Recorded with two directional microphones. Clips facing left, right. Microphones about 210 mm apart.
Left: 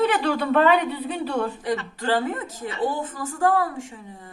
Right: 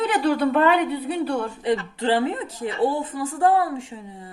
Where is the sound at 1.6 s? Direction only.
20° right (ahead or behind).